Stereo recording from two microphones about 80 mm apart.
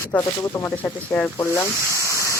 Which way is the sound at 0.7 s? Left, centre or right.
Left.